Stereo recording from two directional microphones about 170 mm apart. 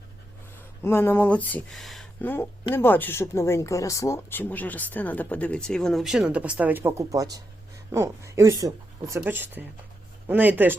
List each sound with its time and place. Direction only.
0.9 s speech: 15° left (ahead or behind)
2.2 s speech: 10° left (ahead or behind); by 10.8 s 10° right (ahead or behind)